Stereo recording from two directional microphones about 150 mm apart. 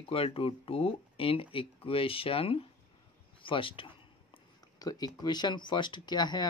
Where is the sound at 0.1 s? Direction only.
40° left (ahead or behind).